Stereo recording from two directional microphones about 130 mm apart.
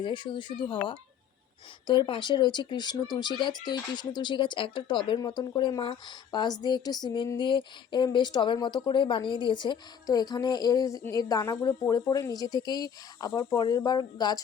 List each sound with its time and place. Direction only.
0.0 s speech: 35° left (ahead or behind)